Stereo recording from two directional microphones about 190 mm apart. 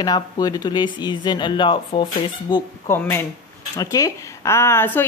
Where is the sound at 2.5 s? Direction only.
15° left (ahead or behind).